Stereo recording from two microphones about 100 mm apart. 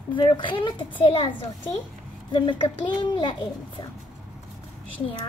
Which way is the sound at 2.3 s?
55° left (ahead or behind).